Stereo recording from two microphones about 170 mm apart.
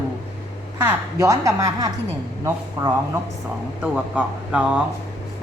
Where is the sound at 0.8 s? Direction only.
15° right (ahead or behind).